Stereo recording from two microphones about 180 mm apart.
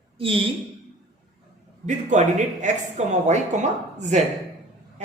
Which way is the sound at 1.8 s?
40° right (ahead or behind).